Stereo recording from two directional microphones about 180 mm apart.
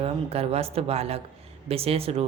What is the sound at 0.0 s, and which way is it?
Speech, 35° right (ahead or behind).